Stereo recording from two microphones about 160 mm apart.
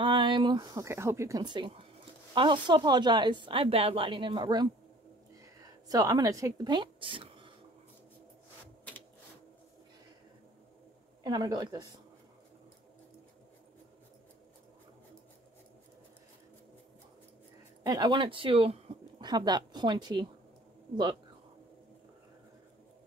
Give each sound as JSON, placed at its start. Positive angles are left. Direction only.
{"t": 0.0, "sound": "a woman's voice", "side_deg": -30}
{"t": 11.2, "sound": "speech", "side_deg": -25}
{"t": 17.8, "sound": "speech", "side_deg": -25}